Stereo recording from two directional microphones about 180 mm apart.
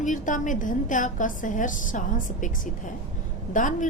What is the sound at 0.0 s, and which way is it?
A woman's voice, 45° left (ahead or behind).